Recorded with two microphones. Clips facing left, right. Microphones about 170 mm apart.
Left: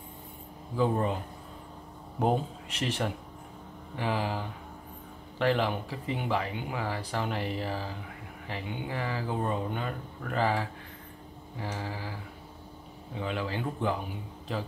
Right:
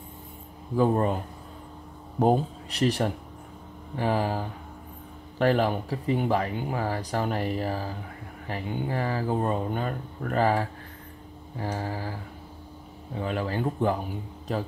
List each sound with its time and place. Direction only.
0.7 s speech: 45° right (ahead or behind)
2.1 s speech: 40° right (ahead or behind)